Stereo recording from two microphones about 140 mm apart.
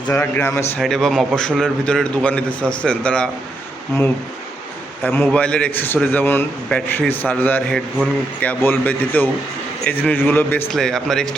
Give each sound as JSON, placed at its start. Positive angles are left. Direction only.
{"t": 0.1, "sound": "a man's voice", "side_deg": 15}
{"t": 0.8, "sound": "a man's voice", "side_deg": 0}
{"t": 5.0, "sound": "a man's voice", "side_deg": 10}